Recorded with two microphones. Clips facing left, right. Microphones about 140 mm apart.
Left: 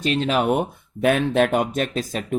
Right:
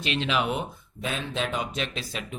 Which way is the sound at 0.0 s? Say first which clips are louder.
Left 6 dB; 40° left (ahead or behind).